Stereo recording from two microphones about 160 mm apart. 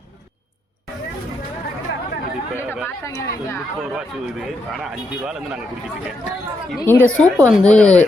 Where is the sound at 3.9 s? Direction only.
Centre (ahead or behind).